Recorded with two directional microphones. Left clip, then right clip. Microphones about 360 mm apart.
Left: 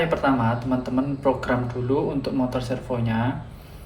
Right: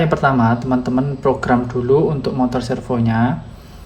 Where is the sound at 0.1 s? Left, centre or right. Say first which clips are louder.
Right 6 dB; centre.